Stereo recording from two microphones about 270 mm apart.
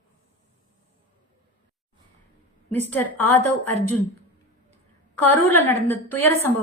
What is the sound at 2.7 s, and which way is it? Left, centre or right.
Speech, centre.